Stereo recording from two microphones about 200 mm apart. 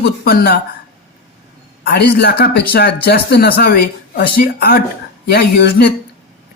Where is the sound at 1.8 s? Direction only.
50° left (ahead or behind).